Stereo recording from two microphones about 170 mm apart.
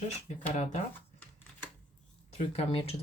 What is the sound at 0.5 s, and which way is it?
Speech, 40° left (ahead or behind).